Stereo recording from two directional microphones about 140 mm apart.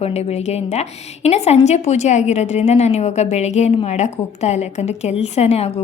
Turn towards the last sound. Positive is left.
turn(degrees=50)  # may be behind; listen again after turning